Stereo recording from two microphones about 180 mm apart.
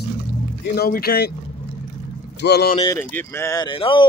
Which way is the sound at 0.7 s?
55° left (ahead or behind).